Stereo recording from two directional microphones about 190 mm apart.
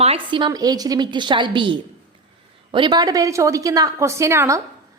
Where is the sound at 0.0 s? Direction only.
30° right (ahead or behind).